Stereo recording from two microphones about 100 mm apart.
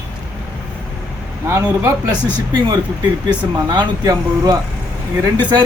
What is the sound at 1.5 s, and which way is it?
Speech, 30° right (ahead or behind).